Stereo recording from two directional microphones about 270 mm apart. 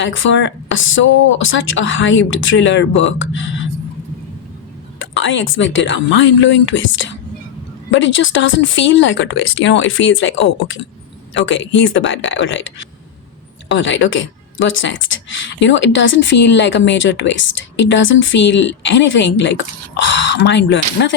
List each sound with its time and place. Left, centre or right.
0.0 s speech: left
4.9 s speech: left